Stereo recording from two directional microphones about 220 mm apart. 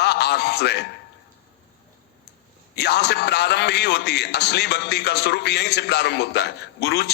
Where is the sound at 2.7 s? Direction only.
50° left (ahead or behind).